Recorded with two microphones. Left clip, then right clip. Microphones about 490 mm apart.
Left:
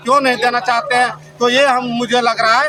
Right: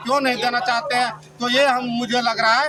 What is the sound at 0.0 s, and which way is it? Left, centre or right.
A man's voice, right.